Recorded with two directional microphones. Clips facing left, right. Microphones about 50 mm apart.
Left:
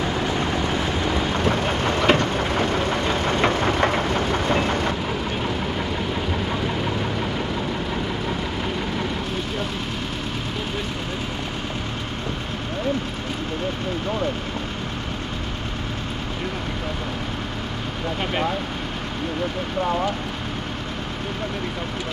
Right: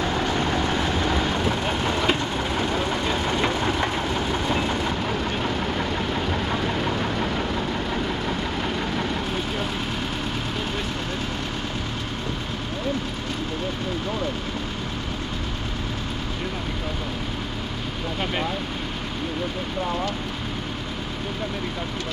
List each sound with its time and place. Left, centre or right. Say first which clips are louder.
0.0 s vehicle: even; centre
1.4 s vehicle: left 2 dB; left